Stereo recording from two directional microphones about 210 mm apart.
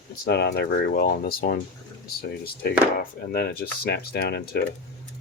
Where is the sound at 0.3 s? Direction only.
50° left (ahead or behind).